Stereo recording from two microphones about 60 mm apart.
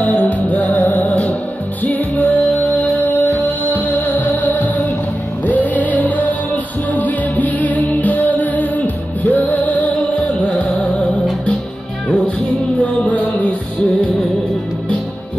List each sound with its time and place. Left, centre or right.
0.0 s music: left
12.8 s music: left